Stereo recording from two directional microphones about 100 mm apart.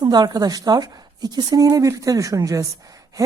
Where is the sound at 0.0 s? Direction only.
45° right (ahead or behind).